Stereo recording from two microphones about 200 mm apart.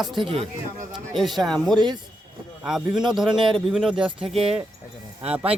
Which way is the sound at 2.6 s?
Centre (ahead or behind).